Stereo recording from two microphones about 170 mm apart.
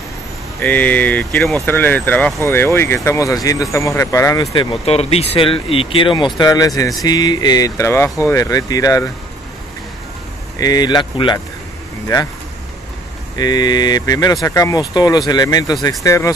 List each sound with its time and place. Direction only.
0.6 s speech: 10° left (ahead or behind)
4.8 s speech: 35° left (ahead or behind); by 9.1 s 20° left (ahead or behind)
10.6 s speech: 25° left (ahead or behind)
13.4 s speech: 25° left (ahead or behind)